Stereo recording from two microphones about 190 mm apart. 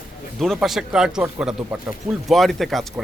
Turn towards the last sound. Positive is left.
turn(degrees=0)  # may be behind; listen again after turning